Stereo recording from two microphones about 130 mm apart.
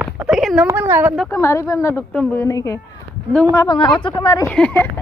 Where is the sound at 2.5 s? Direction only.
25° left (ahead or behind).